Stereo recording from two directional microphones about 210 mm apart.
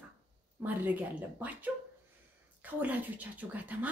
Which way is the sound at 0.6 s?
10° right (ahead or behind).